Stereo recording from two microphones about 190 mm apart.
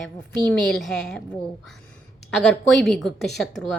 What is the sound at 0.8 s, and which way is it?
Speech, centre (ahead or behind).